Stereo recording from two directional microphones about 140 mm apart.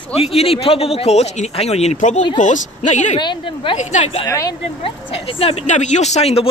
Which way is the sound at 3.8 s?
55° left (ahead or behind).